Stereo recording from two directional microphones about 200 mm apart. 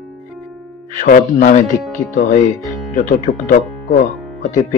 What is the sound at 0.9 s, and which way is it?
Speech, 40° left (ahead or behind).